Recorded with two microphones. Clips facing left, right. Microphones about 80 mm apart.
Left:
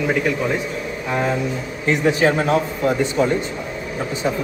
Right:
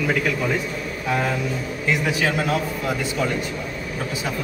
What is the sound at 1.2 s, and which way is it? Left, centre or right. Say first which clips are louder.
Speech: left 3 dB; left.